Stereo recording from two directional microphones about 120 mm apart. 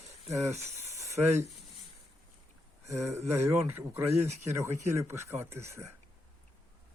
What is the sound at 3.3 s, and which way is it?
Speech, 25° right (ahead or behind).